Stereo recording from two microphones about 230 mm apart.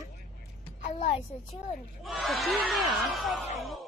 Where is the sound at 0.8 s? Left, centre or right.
Left.